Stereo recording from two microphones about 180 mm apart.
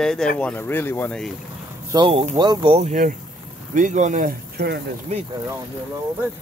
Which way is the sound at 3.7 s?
45° right (ahead or behind).